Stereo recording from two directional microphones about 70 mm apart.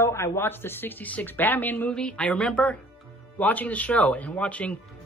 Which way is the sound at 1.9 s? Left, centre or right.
Centre.